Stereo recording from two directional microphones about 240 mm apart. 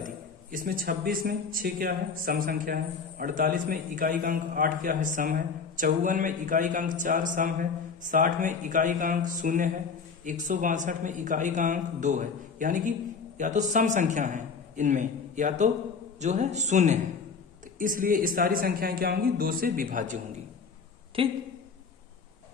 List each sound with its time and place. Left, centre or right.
0.0 s a man's voice: right